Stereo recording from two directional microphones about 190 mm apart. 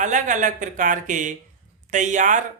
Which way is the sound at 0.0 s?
40° right (ahead or behind).